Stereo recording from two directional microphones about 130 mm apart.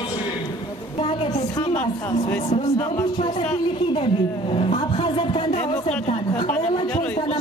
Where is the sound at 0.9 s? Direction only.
45° left (ahead or behind).